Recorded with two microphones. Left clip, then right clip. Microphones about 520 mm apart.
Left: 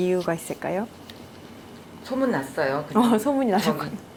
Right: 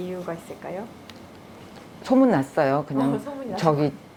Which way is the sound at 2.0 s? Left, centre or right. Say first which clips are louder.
Right 5 dB; right.